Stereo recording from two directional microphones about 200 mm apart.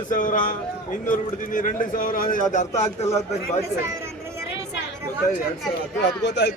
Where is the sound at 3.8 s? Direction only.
10° right (ahead or behind).